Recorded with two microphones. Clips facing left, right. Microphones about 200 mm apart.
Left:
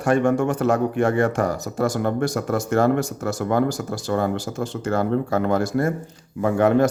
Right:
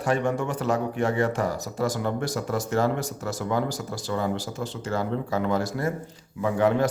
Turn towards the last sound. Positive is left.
turn(degrees=50)  # may be behind; listen again after turning